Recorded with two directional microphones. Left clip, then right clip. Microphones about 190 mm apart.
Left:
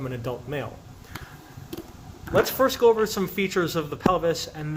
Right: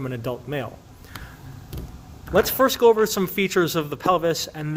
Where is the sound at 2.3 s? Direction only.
55° right (ahead or behind).